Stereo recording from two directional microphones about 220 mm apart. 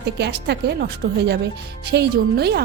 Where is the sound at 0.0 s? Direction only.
50° right (ahead or behind).